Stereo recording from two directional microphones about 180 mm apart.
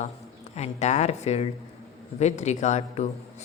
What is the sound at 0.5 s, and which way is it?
A woman's voice, 40° left (ahead or behind).